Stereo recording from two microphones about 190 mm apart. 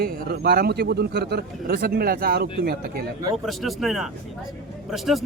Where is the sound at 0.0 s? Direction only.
55° right (ahead or behind).